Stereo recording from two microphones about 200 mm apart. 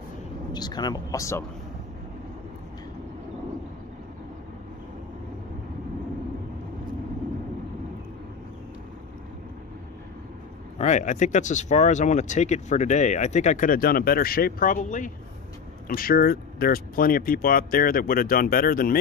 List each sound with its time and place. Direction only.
0.5 s speech: 20° left (ahead or behind)
10.8 s speech: 35° left (ahead or behind)